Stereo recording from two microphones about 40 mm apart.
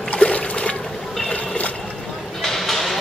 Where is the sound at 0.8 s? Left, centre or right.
Centre.